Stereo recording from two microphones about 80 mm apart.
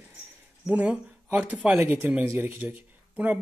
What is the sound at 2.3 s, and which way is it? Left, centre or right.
Speech, right.